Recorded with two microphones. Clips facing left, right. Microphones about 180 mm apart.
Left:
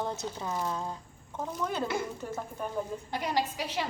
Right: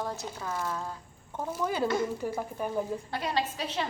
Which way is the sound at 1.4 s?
5° right (ahead or behind).